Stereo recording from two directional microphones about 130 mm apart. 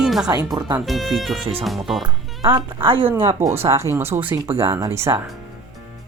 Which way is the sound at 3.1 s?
20° right (ahead or behind).